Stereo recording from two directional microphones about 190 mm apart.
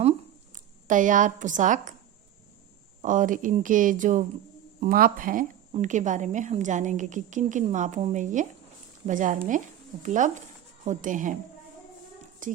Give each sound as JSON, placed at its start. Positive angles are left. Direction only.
{"t": 0.5, "sound": "speech", "side_deg": -40}
{"t": 3.0, "sound": "a woman's voice", "side_deg": -40}
{"t": 12.4, "sound": "speech", "side_deg": -45}